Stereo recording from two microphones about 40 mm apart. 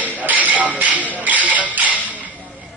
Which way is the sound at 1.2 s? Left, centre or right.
Right.